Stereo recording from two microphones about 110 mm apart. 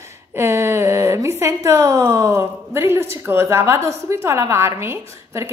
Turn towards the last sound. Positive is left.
turn(degrees=-25)  # may be behind; listen again after turning